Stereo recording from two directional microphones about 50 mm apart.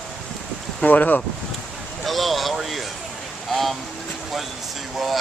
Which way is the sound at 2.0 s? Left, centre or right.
Centre.